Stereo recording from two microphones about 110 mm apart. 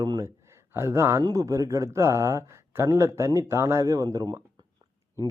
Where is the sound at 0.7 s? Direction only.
25° right (ahead or behind).